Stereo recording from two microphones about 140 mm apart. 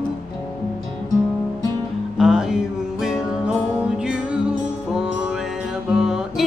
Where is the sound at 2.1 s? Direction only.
Centre (ahead or behind).